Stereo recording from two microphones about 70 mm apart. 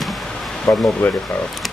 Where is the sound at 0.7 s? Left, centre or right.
Left.